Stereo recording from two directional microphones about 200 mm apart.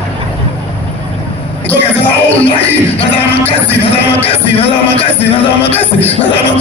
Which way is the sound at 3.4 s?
30° left (ahead or behind).